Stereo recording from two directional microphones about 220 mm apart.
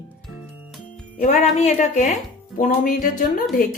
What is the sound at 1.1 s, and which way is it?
A woman's voice, 35° left (ahead or behind).